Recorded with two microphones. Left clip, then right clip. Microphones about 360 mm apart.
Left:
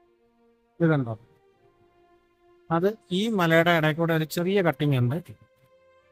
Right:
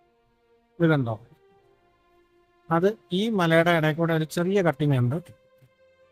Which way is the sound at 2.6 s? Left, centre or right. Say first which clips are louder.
Right 2 dB; centre.